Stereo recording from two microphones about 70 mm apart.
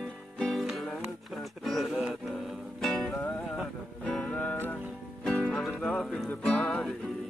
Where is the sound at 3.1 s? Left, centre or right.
Left.